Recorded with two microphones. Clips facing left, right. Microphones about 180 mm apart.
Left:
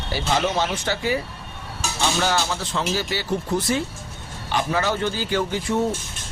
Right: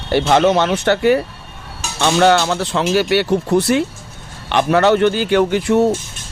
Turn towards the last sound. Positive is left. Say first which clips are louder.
# right 9 dB
turn(degrees=-70)  # may be behind; listen again after turning